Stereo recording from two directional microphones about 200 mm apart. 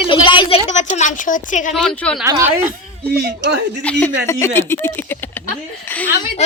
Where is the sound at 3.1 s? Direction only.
55° right (ahead or behind).